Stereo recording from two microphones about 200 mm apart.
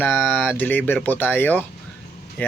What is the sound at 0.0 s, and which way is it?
Speech, 10° left (ahead or behind).